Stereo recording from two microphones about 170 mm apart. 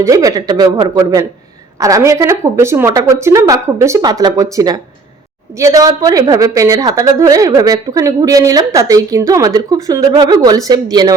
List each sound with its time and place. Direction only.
0.0 s a woman's voice: 20° right (ahead or behind)